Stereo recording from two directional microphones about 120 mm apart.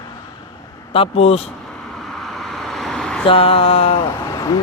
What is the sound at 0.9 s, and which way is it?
Speech, 55° left (ahead or behind).